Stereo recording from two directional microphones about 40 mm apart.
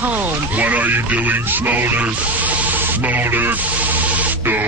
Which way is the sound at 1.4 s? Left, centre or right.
Right.